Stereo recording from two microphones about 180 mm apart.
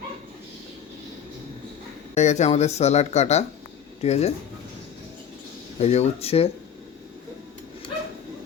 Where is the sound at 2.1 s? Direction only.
40° left (ahead or behind).